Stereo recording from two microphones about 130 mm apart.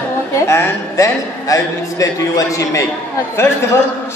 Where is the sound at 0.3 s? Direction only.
20° left (ahead or behind).